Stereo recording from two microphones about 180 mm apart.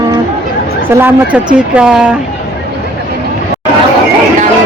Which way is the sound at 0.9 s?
10° right (ahead or behind).